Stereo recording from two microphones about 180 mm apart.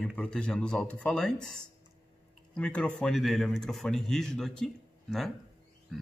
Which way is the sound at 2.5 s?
5° left (ahead or behind).